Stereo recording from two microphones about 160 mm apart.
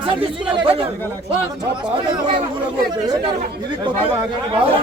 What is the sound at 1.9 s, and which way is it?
Speech, 30° right (ahead or behind).